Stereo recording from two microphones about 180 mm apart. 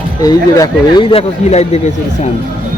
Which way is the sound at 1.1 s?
35° left (ahead or behind).